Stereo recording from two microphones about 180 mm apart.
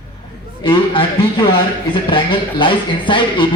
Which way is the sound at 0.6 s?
30° left (ahead or behind).